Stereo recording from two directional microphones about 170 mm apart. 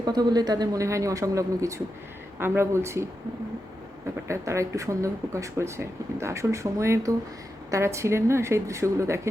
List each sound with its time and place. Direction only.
0.0 s speech: 25° right (ahead or behind)
4.3 s speech: 15° right (ahead or behind)